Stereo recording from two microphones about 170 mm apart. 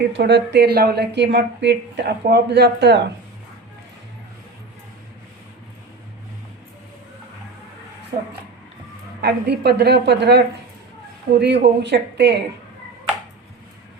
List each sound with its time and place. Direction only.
0.1 s a woman's voice: 90° right
9.2 s a woman's voice: 75° right (ahead or behind)